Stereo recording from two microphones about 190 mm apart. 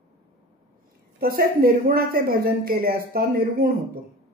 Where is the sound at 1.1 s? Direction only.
50° right (ahead or behind).